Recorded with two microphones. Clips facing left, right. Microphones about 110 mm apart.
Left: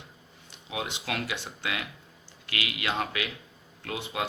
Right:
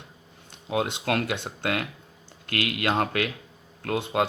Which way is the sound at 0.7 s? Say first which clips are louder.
Right 8 dB; 50° right (ahead or behind).